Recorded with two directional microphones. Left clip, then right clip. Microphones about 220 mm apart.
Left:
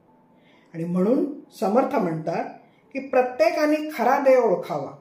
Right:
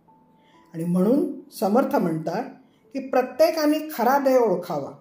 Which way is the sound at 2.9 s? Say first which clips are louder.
Even; 45° right (ahead or behind).